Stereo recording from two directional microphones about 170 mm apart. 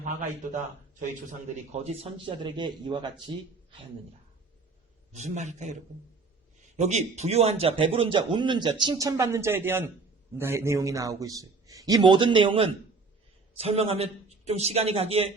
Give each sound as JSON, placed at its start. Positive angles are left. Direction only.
{"t": 0.9, "sound": "a man's voice", "side_deg": -45}
{"t": 5.1, "sound": "a man's voice", "side_deg": -45}
{"t": 6.7, "sound": "a man's voice", "side_deg": -40}